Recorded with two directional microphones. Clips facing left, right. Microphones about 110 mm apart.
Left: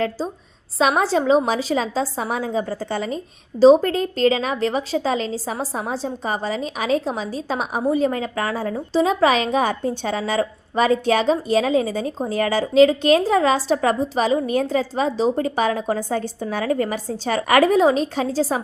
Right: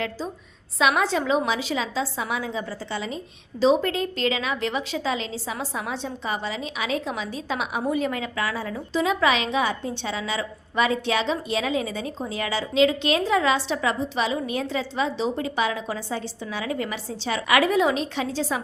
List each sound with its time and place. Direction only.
0.8 s a woman's voice: 35° left (ahead or behind)